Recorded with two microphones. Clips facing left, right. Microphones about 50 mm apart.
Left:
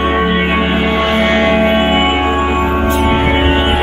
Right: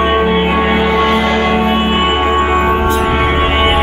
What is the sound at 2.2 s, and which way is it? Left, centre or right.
Music, right.